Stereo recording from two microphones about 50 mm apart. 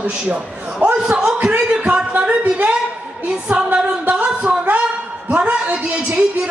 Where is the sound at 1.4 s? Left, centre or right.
Right.